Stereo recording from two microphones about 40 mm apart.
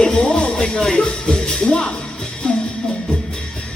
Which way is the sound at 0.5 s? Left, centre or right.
Left.